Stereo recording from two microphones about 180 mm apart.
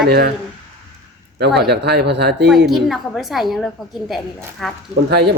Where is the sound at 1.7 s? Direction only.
65° right (ahead or behind).